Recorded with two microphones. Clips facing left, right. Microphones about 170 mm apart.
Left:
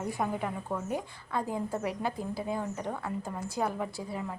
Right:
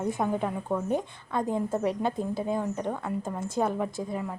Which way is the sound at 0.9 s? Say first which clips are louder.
Right 5 dB; 20° right (ahead or behind).